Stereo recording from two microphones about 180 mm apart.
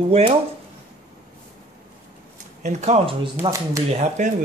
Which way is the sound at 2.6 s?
35° right (ahead or behind).